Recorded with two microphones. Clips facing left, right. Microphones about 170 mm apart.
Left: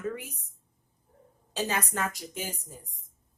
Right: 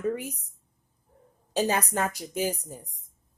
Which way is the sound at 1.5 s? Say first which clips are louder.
Right 5 dB; 35° right (ahead or behind).